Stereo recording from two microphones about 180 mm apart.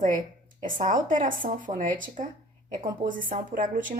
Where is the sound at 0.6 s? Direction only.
50° right (ahead or behind).